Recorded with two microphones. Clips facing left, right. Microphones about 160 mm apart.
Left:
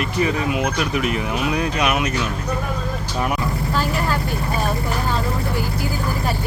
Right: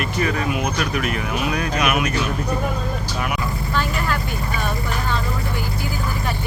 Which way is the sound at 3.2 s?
35° left (ahead or behind).